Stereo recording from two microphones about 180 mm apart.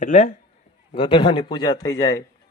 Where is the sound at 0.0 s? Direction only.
45° left (ahead or behind).